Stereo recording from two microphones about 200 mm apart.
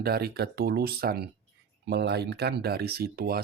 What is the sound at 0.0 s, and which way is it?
Speech, 50° right (ahead or behind).